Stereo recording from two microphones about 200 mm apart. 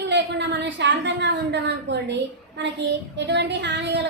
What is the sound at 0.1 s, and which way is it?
A woman's voice, 60° right (ahead or behind).